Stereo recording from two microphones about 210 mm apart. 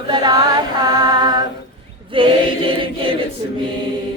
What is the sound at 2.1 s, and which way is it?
Chant, 25° right (ahead or behind).